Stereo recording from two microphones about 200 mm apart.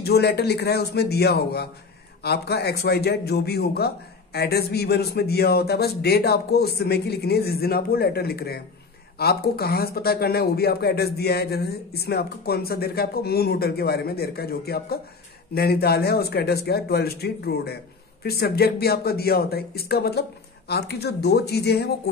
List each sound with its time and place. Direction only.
0.0 s a man's voice: 55° left (ahead or behind)